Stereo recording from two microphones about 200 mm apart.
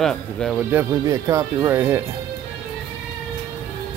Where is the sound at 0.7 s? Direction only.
15° right (ahead or behind).